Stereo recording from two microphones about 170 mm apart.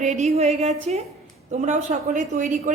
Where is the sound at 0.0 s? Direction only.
40° right (ahead or behind).